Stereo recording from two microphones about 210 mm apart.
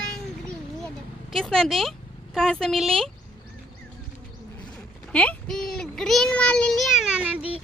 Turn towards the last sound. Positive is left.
turn(degrees=-5)  # may be behind; listen again after turning